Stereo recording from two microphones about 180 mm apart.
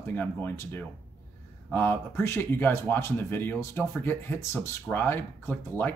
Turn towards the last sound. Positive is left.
turn(degrees=10)  # may be behind; listen again after turning